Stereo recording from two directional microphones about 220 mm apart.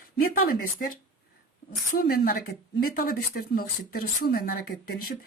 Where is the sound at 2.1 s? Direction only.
45° left (ahead or behind).